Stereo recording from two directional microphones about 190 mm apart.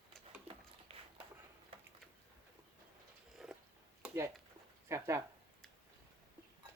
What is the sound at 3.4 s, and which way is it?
Cat, centre (ahead or behind).